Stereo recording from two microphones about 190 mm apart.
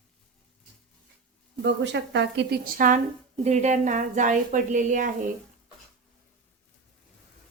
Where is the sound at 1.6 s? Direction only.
65° right (ahead or behind); by 2.9 s 50° right (ahead or behind).